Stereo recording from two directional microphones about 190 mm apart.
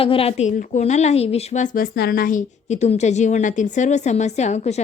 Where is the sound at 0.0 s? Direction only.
30° left (ahead or behind).